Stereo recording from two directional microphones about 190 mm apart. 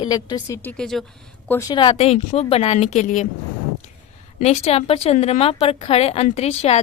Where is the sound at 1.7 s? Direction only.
25° left (ahead or behind).